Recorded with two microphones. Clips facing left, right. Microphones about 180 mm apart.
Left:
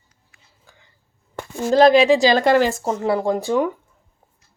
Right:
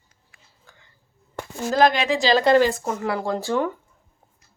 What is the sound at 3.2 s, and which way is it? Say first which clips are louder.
Speech: left 4 dB; 15° left (ahead or behind).